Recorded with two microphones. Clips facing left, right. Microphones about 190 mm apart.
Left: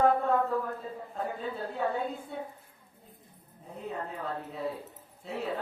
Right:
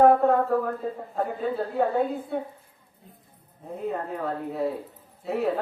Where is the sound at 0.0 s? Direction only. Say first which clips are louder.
Right 7 dB; 55° right (ahead or behind).